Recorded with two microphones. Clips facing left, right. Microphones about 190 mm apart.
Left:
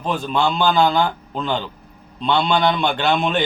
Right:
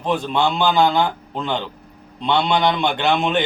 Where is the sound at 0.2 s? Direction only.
20° right (ahead or behind).